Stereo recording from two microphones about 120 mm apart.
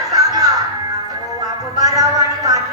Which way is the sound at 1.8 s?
30° right (ahead or behind).